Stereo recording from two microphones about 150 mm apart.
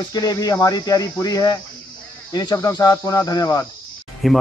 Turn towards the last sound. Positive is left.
turn(degrees=0)  # may be behind; listen again after turning